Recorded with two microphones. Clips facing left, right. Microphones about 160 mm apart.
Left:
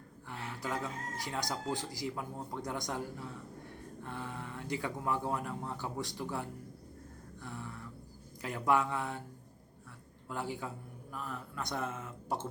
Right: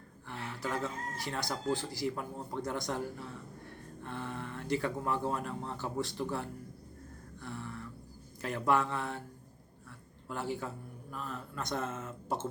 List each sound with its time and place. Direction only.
0.3 s speech: 15° left (ahead or behind)
7.4 s a sound: 15° left (ahead or behind)
8.4 s speech: 15° left (ahead or behind)
10.2 s speech: 15° left (ahead or behind)